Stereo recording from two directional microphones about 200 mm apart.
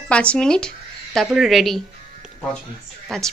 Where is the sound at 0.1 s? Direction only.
5° left (ahead or behind).